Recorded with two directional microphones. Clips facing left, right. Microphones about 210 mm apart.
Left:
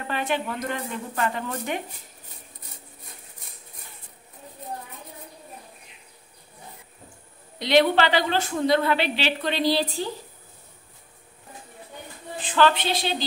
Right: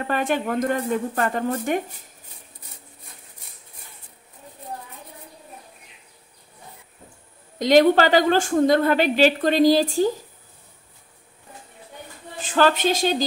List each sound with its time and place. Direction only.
0.0 s a woman's voice: 45° right (ahead or behind)
7.5 s a woman's voice: 45° right (ahead or behind)
12.4 s a woman's voice: 45° right (ahead or behind)